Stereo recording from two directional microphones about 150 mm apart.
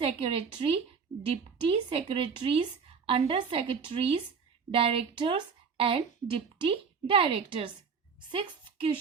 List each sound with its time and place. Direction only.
0.0 s a woman's voice: 40° right (ahead or behind)